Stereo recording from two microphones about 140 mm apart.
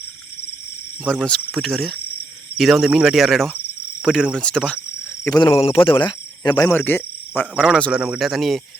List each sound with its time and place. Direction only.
1.0 s speech: 5° left (ahead or behind)
1.5 s cricket: centre (ahead or behind)
4.0 s speech: 5° left (ahead or behind)
5.4 s speech: 40° left (ahead or behind)
6.7 s speech: 15° left (ahead or behind)
7.8 s cricket: 5° left (ahead or behind)